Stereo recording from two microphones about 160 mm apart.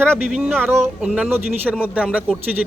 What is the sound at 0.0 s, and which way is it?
A man's voice, 10° right (ahead or behind).